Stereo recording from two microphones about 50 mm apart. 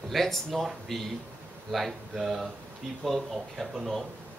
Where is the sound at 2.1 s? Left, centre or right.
Centre.